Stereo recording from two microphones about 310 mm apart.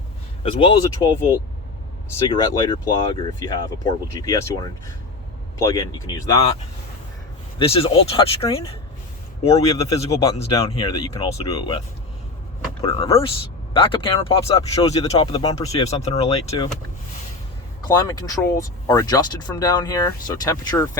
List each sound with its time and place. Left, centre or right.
0.4 s speech: centre
2.1 s speech: centre
7.6 s speech: centre
12.8 s speech: centre
17.8 s speech: centre